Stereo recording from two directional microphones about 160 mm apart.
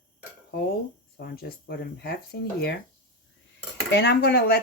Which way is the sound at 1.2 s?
80° left.